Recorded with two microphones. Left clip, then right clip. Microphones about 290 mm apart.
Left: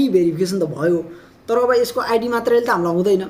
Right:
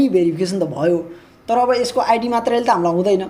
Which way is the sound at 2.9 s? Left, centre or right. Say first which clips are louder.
Right 1 dB; centre.